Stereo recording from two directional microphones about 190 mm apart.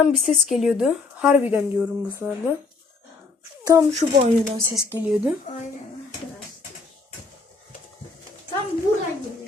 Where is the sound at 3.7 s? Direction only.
15° right (ahead or behind).